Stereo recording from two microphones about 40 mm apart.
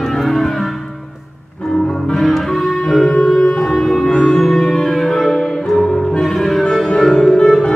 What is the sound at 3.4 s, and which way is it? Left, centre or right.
Shofar, left.